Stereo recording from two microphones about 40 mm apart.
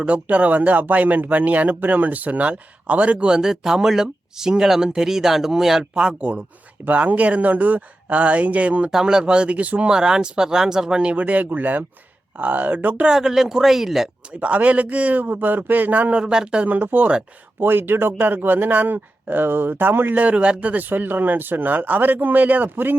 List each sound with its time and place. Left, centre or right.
0.0 s speech: right
3.2 s speech: centre
6.8 s speech: right
8.9 s speech: centre
9.2 s speech: right
9.9 s speech: centre
11.2 s speech: right
13.1 s speech: centre
14.4 s speech: right
16.1 s speech: right
16.6 s speech: right
17.6 s speech: right
20.1 s speech: right
20.9 s speech: right